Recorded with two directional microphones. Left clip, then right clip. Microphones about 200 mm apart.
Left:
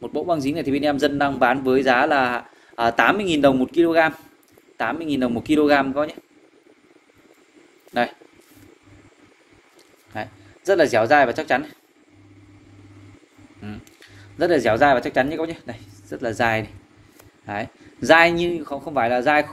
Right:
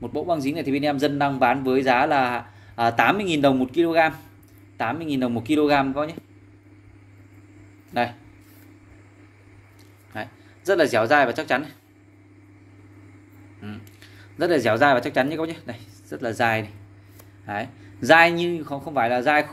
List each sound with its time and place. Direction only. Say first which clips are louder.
0.0 s speech: left 2 dB; 20° left (ahead or behind)
7.9 s speech: left 2 dB; 25° left (ahead or behind)
10.1 s speech: left 3 dB; 10° left (ahead or behind)
13.6 s speech: left 2 dB; 15° left (ahead or behind)